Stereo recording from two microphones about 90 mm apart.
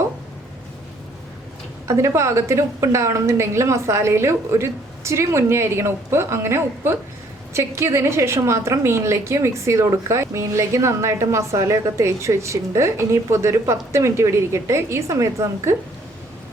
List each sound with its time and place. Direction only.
1.9 s a woman's voice: 30° right (ahead or behind)